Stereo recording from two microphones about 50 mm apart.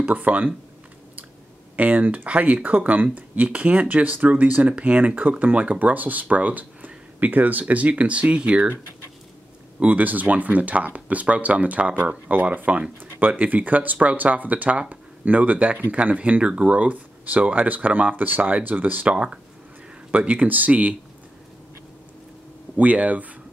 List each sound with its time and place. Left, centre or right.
0.0 s speech: right
1.8 s speech: right
9.8 s speech: right
19.1 s speech: right
22.8 s speech: right